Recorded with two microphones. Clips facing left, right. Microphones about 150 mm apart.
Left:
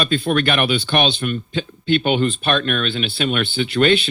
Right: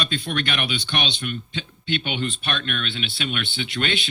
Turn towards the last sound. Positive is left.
turn(degrees=75)  # may be behind; listen again after turning